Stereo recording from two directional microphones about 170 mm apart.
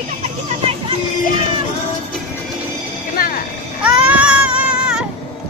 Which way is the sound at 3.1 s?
55° left (ahead or behind).